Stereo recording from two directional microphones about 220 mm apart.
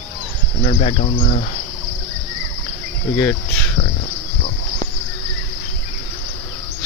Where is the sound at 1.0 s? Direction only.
30° left (ahead or behind).